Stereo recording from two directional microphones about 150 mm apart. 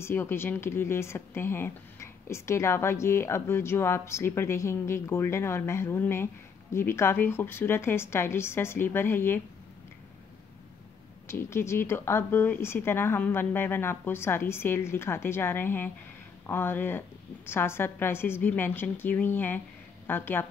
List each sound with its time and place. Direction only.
0.0 s speech: 15° left (ahead or behind)
11.2 s speech: 15° left (ahead or behind)